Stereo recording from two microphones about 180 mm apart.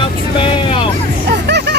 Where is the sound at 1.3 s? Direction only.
70° right (ahead or behind).